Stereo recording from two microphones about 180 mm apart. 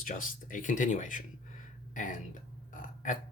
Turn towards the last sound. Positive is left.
turn(degrees=45)  # may be behind; listen again after turning